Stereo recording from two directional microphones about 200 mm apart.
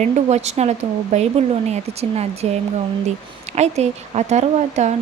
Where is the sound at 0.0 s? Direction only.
35° right (ahead or behind).